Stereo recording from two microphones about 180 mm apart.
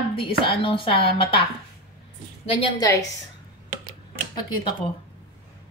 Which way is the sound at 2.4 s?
30° left (ahead or behind).